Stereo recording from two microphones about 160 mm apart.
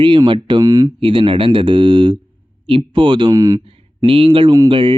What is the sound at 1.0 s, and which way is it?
Speech, 30° right (ahead or behind).